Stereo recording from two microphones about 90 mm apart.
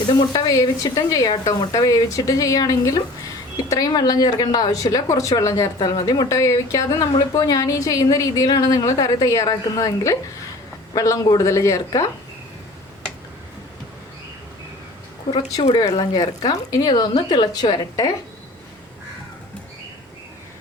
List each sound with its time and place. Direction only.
0.3 s speech: 40° left (ahead or behind)
5.8 s speech: 50° left (ahead or behind)
15.5 s speech: 45° left (ahead or behind)